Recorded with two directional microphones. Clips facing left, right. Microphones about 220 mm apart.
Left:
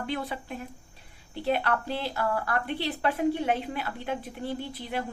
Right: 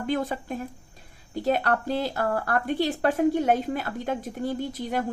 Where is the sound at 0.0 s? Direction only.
45° right (ahead or behind).